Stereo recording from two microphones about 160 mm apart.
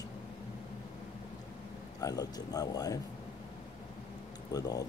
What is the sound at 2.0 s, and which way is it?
Speech, 20° left (ahead or behind).